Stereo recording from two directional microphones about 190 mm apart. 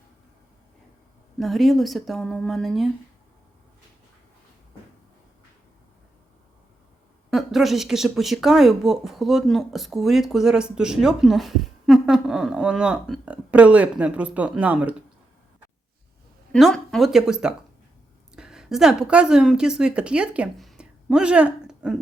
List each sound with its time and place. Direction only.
1.4 s speech: centre (ahead or behind)
7.3 s speech: centre (ahead or behind)
16.5 s a woman's voice: centre (ahead or behind)